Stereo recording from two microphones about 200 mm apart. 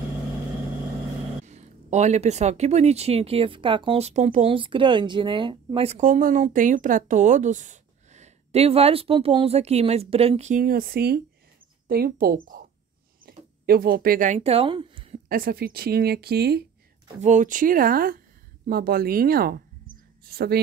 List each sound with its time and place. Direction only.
1.4 s speech: 35° right (ahead or behind)
13.2 s a sound: 50° right (ahead or behind); by 15.1 s 25° right (ahead or behind)
15.2 s speech: 45° right (ahead or behind)
17.2 s speech: 40° right (ahead or behind)